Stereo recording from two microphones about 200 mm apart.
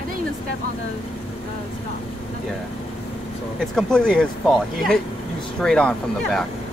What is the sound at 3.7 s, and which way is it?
Speech, 5° left (ahead or behind).